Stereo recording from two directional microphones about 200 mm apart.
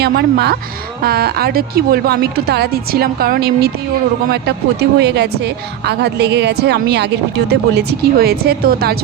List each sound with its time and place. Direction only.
0.0 s a woman's voice: 55° right (ahead or behind)